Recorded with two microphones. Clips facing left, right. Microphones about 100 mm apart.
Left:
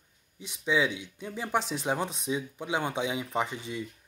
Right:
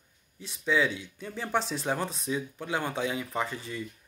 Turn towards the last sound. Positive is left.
turn(degrees=20)  # may be behind; listen again after turning